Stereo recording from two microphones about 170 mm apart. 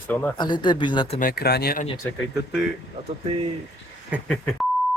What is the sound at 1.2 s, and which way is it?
Speech, 60° left (ahead or behind).